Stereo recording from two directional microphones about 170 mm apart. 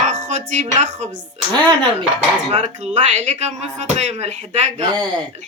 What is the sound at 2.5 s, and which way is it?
Speech, 40° right (ahead or behind).